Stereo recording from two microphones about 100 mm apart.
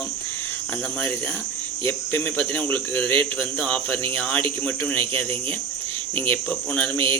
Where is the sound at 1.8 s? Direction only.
20° left (ahead or behind).